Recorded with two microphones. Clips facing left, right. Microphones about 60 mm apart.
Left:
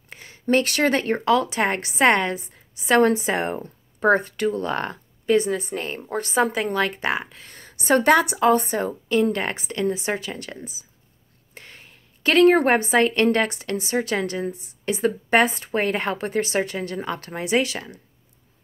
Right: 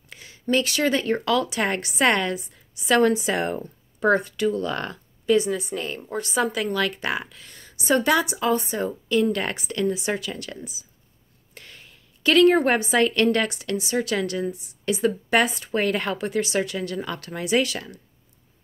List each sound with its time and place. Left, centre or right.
0.1 s speech: left
11.5 s a sound: left
12.6 s speech: left